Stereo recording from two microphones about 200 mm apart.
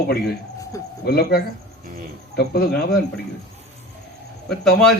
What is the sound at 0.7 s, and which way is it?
Bird, 15° left (ahead or behind).